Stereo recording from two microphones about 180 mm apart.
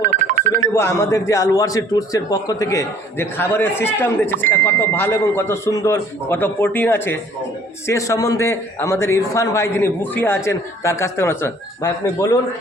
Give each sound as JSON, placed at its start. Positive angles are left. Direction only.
{"t": 0.0, "sound": "telephone bell ringing", "side_deg": -45}
{"t": 0.7, "sound": "a man's voice", "side_deg": 15}